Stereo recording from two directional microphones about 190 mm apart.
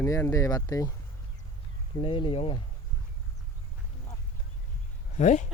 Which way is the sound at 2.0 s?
30° left (ahead or behind).